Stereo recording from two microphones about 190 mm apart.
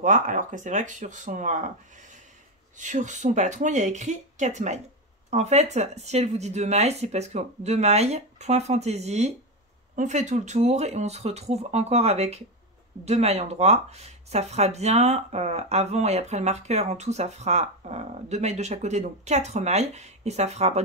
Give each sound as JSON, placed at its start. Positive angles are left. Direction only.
{"t": 0.0, "sound": "speech", "side_deg": -45}